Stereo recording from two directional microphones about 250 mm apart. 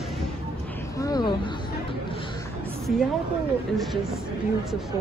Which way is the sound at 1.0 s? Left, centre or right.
Centre.